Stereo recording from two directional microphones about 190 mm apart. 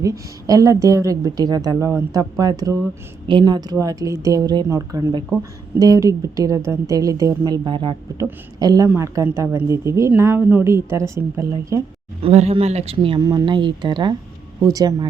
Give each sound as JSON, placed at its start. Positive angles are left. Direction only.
{"t": 0.0, "sound": "a woman's voice", "side_deg": -20}
{"t": 12.2, "sound": "speech", "side_deg": -35}